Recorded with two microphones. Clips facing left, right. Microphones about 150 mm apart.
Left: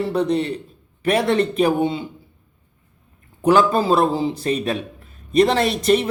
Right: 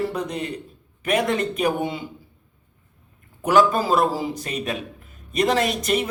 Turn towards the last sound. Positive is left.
turn(degrees=35)  # may be behind; listen again after turning